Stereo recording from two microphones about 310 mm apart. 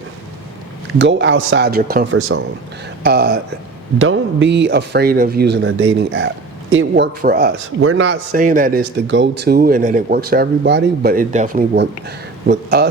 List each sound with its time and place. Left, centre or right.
0.9 s speech: right
7.8 s speech: right